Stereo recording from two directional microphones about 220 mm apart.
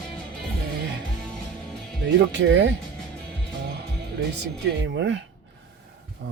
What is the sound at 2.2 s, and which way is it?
Speech, 55° right (ahead or behind).